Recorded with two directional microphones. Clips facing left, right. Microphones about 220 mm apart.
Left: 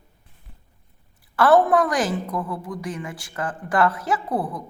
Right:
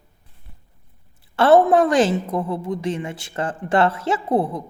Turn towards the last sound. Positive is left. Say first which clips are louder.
# right 5 dB
turn(degrees=-25)  # may be behind; listen again after turning